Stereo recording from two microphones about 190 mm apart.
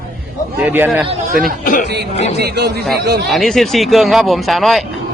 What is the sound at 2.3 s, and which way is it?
Speech, 60° right (ahead or behind).